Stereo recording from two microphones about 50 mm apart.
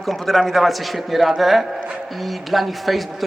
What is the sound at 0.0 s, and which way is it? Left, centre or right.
Speech, centre.